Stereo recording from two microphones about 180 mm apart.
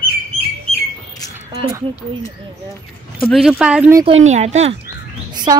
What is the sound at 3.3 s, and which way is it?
Speech, 5° right (ahead or behind).